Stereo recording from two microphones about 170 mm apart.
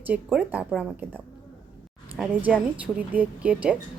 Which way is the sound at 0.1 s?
10° right (ahead or behind).